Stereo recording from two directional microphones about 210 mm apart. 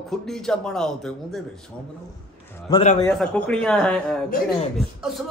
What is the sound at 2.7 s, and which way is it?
Speech, 20° left (ahead or behind).